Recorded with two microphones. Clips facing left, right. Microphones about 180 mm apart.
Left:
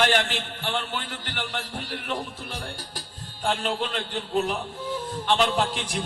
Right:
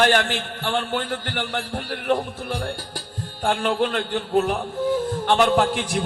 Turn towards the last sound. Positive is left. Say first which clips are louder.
# right 5 dB
turn(degrees=-55)  # may be behind; listen again after turning